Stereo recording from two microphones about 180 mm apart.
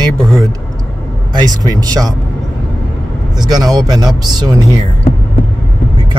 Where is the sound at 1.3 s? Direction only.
20° right (ahead or behind).